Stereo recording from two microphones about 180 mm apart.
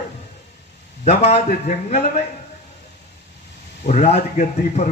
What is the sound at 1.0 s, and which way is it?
Speech, 35° left (ahead or behind).